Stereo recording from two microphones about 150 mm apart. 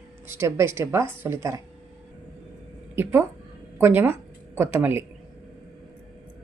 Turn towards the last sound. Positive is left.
turn(degrees=-15)  # may be behind; listen again after turning